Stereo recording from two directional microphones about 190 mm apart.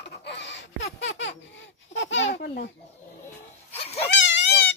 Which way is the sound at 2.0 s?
80° left.